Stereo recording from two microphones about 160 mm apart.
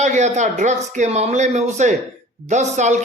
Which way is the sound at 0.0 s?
50° right (ahead or behind).